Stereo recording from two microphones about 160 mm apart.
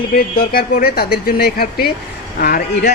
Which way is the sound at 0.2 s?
65° left (ahead or behind).